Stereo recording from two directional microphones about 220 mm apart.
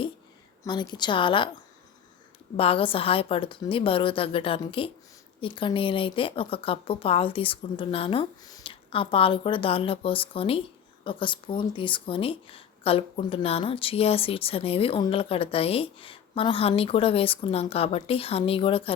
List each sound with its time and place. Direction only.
0.6 s speech: 20° left (ahead or behind)
2.6 s speech: 25° left (ahead or behind)